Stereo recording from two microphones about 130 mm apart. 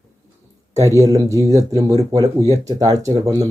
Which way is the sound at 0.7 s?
25° right (ahead or behind).